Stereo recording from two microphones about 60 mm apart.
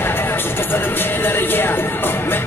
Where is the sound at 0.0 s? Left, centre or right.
Left.